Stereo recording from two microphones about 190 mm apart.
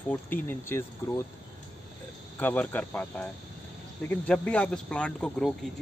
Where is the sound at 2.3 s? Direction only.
10° left (ahead or behind).